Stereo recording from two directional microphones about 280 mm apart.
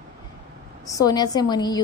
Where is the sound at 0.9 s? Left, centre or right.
Centre.